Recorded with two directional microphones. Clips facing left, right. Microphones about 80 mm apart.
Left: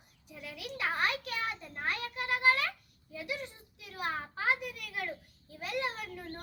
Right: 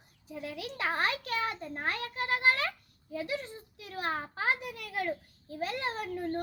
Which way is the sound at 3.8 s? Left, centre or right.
Right.